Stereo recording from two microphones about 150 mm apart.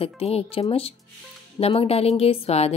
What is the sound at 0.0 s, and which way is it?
Speech, 40° left (ahead or behind).